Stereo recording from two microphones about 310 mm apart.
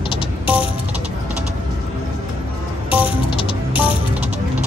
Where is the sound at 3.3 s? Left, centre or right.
Centre.